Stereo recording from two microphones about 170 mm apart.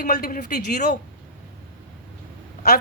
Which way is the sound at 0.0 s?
60° left (ahead or behind).